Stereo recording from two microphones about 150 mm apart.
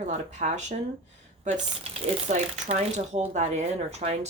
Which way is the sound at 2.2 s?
50° right (ahead or behind).